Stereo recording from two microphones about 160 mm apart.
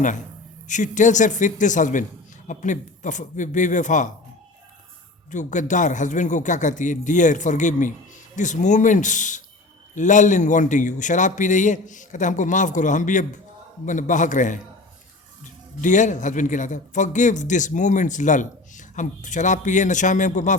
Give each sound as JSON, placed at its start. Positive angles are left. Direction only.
{"t": 0.7, "sound": "a man's voice", "side_deg": 50}
{"t": 5.3, "sound": "a man's voice", "side_deg": 50}
{"t": 15.8, "sound": "a man's voice", "side_deg": 50}